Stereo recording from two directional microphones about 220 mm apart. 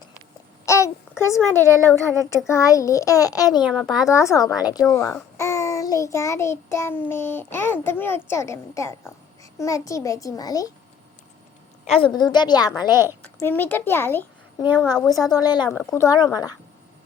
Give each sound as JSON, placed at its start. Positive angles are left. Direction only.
{"t": 0.6, "sound": "a child's voice", "side_deg": 15}
{"t": 3.6, "sound": "a child's voice", "side_deg": -5}
{"t": 4.0, "sound": "a child's voice", "side_deg": 15}
{"t": 11.9, "sound": "a woman's voice", "side_deg": 25}
{"t": 12.9, "sound": "a woman's voice", "side_deg": -10}
{"t": 13.2, "sound": "a child's voice", "side_deg": 10}